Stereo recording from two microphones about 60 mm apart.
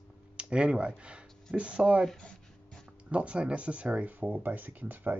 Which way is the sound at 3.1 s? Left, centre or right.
Right.